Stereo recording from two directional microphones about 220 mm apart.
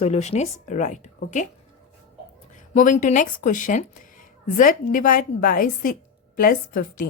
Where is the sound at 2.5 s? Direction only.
35° left (ahead or behind).